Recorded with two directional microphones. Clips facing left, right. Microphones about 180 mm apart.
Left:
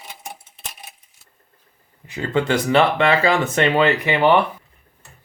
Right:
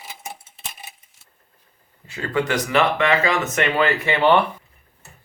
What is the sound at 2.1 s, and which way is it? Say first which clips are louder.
Speech: left 3 dB; 25° left (ahead or behind).